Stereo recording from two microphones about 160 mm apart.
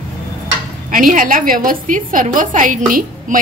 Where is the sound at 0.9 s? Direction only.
55° right (ahead or behind).